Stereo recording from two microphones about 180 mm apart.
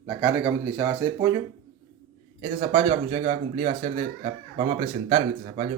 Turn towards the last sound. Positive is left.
turn(degrees=-35)  # may be behind; listen again after turning